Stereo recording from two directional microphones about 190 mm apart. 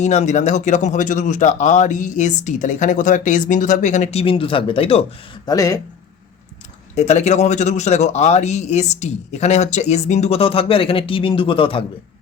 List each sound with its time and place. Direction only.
0.0 s speech: 35° left (ahead or behind)
5.5 s speech: 20° left (ahead or behind)
6.9 s speech: 35° left (ahead or behind)